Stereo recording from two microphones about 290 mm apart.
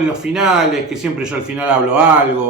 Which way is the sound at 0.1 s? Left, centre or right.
Centre.